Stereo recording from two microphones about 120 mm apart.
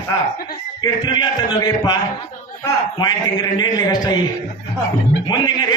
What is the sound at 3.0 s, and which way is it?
A man's voice, 35° left (ahead or behind).